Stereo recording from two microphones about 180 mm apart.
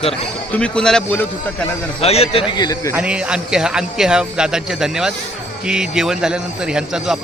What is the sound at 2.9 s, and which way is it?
A man's voice, 5° right (ahead or behind).